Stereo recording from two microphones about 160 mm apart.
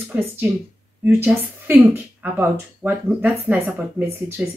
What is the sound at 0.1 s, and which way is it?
Speech, 15° right (ahead or behind).